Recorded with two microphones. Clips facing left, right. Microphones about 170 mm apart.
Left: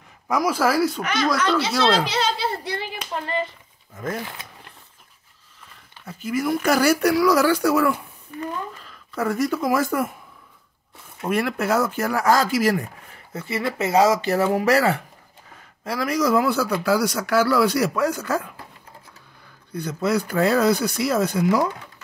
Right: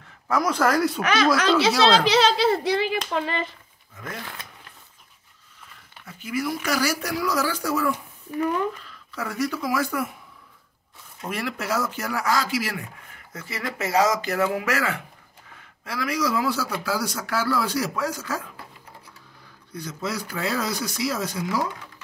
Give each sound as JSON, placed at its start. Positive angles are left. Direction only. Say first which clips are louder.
{"t": 0.3, "sound": "speech", "louder": "left 1 dB", "side_deg": 10}
{"t": 2.0, "sound": "speech", "louder": "right 5 dB", "side_deg": -90}
{"t": 6.1, "sound": "a man's voice", "louder": "left 4 dB", "side_deg": 45}
{"t": 9.1, "sound": "speech", "louder": "left 5 dB", "side_deg": 50}
{"t": 11.1, "sound": "speech", "louder": "left 7 dB", "side_deg": 55}
{"t": 13.3, "sound": "a man's voice", "louder": "left 6 dB", "side_deg": 25}
{"t": 19.7, "sound": "a man's voice", "louder": "left 8 dB", "side_deg": 60}